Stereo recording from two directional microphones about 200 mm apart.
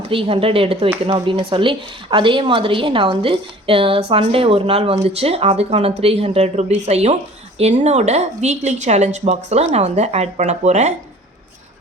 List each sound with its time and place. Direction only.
0.0 s speech: 25° right (ahead or behind)